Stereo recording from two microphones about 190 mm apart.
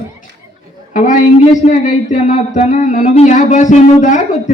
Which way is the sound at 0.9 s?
40° left (ahead or behind).